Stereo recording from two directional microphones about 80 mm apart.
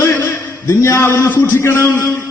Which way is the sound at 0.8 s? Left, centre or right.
Left.